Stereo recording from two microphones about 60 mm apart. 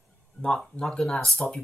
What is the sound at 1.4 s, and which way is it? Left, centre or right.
Speech, centre.